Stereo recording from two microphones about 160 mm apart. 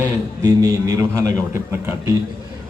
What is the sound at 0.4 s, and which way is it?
Speech, 25° right (ahead or behind).